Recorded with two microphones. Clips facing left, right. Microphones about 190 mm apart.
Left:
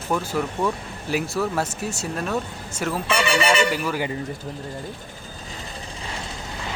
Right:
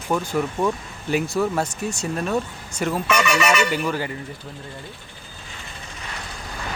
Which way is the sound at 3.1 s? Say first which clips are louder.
Even; 30° left (ahead or behind).